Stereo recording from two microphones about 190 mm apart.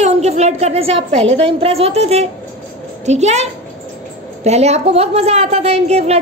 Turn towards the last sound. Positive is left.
turn(degrees=-35)  # may be behind; listen again after turning